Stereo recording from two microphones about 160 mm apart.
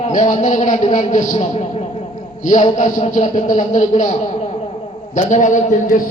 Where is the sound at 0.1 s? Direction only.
55° left (ahead or behind).